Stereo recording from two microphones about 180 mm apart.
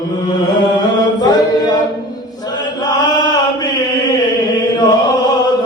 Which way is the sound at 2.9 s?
25° left (ahead or behind).